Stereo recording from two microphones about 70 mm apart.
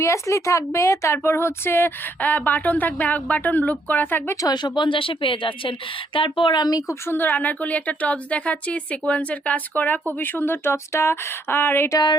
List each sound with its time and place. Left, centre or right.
0.0 s a woman's voice: left
4.4 s speech: left
6.5 s speech: left
7.0 s a woman's voice: left
11.9 s speech: left